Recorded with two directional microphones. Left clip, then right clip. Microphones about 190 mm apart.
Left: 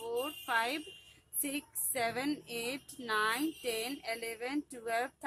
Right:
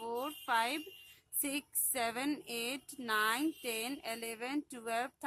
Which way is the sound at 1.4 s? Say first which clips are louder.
Even; 25° right (ahead or behind).